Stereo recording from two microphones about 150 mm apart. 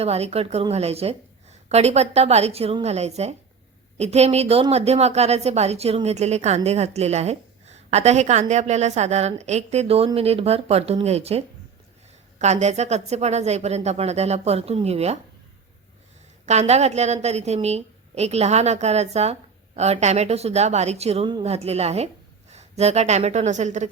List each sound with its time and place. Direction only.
0.0 s a woman's voice: 45° right (ahead or behind)
16.5 s a woman's voice: 50° right (ahead or behind)